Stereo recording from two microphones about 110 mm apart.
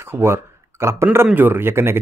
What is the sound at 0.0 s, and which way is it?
Speech, 25° right (ahead or behind).